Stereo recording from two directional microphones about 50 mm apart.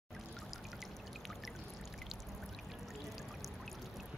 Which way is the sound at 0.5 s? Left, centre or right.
Centre.